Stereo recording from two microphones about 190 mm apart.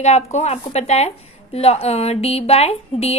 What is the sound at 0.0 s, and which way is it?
Speech, 35° left (ahead or behind).